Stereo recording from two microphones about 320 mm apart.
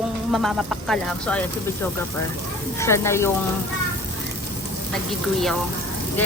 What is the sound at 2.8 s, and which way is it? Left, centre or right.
Speech, centre.